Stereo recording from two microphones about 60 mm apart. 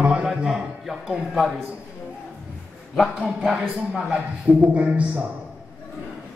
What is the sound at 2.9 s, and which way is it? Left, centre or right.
A man's voice, centre.